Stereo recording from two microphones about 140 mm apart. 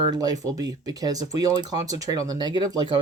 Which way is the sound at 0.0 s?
30° right (ahead or behind).